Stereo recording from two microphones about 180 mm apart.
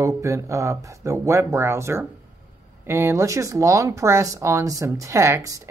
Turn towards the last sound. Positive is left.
turn(degrees=-15)  # may be behind; listen again after turning